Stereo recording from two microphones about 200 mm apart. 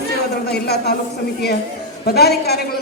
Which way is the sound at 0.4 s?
55° left (ahead or behind).